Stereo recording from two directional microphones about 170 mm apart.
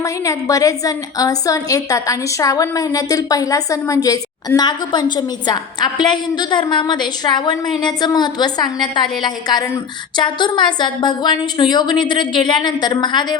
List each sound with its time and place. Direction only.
0.0 s a woman's voice: 20° left (ahead or behind)